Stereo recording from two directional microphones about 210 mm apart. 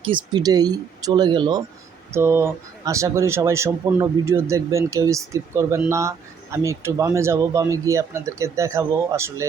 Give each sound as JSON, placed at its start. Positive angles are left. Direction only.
{"t": 0.0, "sound": "speech", "side_deg": -20}